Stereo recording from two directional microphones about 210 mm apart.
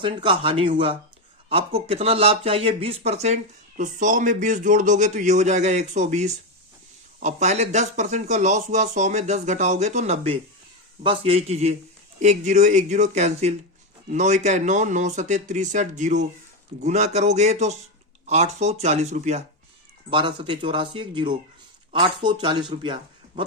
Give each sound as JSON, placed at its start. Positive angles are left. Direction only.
{"t": 0.0, "sound": "a man's voice", "side_deg": -25}